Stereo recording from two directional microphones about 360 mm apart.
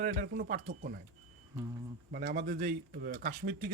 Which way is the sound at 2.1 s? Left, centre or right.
Right.